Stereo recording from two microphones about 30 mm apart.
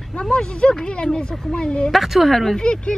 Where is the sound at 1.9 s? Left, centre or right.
Centre.